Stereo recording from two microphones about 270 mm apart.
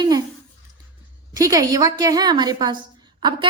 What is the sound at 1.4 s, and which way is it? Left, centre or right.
A woman's voice, centre.